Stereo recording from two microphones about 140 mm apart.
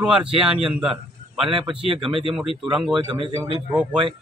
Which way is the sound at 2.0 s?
35° right (ahead or behind).